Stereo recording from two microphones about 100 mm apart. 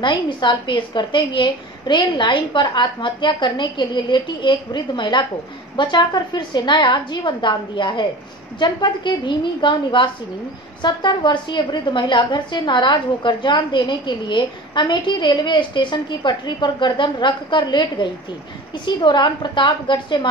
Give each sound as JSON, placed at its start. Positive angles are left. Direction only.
{"t": 0.0, "sound": "a woman's voice", "side_deg": 50}